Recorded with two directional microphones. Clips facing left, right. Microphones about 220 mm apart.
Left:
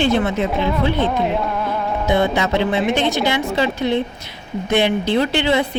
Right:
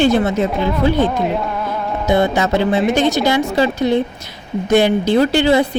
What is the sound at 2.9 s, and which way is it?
Speech, 40° right (ahead or behind).